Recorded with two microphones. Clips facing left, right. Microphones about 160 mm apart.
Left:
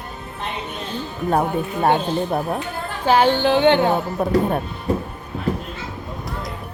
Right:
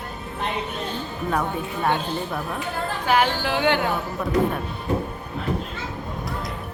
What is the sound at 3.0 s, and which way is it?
Music, 30° left (ahead or behind).